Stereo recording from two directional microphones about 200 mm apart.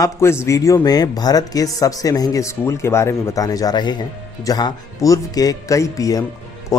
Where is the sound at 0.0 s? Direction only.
15° left (ahead or behind).